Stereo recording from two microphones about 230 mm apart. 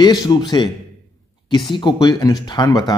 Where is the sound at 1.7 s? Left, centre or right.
Centre.